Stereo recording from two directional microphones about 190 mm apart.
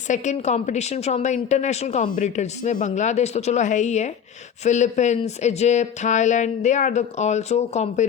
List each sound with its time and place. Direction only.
0.1 s speech: 40° left (ahead or behind)